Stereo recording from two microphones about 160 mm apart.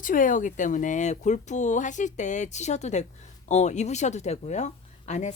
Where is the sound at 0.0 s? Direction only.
55° left (ahead or behind).